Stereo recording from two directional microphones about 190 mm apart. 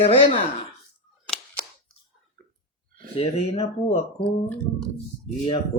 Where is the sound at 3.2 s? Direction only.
30° left (ahead or behind).